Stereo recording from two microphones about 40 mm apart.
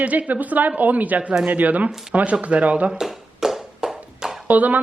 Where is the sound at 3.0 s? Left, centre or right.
Centre.